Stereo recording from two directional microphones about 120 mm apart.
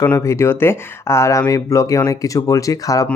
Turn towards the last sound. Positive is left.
turn(degrees=30)  # may be behind; listen again after turning